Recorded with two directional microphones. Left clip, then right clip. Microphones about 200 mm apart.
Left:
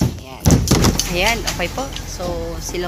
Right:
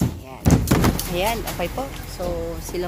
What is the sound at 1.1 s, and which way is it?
Speech, centre (ahead or behind).